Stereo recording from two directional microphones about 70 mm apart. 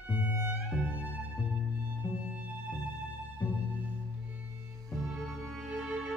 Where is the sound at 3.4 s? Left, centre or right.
Left.